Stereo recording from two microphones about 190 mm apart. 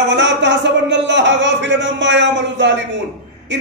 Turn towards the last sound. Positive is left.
turn(degrees=-65)  # may be behind; listen again after turning